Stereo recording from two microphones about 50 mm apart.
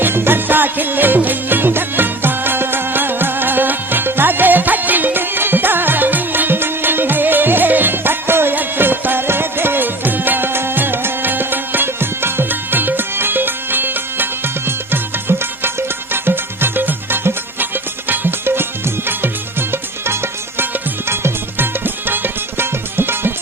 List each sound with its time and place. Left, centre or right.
0.0 s music: right